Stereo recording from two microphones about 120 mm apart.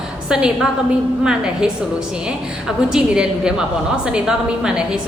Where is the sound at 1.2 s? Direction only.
5° right (ahead or behind).